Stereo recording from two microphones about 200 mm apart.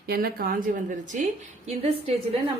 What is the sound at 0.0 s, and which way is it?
A woman's voice, 50° right (ahead or behind).